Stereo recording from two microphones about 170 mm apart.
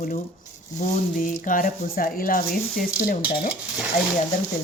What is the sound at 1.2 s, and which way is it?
Speech, 50° left (ahead or behind).